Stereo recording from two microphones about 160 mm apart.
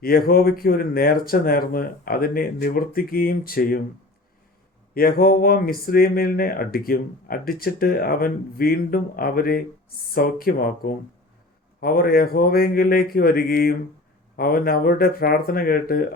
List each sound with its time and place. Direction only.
0.0 s speech: 70° left (ahead or behind)
4.9 s speech: 65° left (ahead or behind)